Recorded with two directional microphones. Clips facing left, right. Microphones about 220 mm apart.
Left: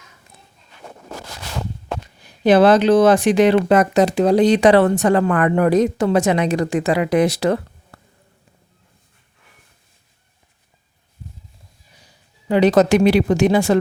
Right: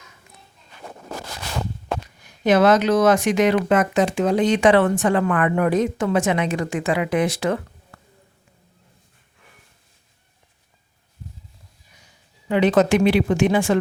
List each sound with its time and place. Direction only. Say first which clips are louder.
2.2 s speech: left 4 dB; 30° left (ahead or behind)
12.5 s speech: left 3 dB; 35° left (ahead or behind)